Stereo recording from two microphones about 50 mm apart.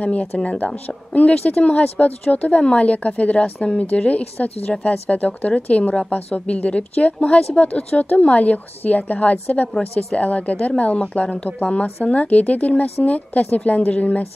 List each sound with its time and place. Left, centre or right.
0.0 s a woman's voice: left
7.9 s a woman's voice: left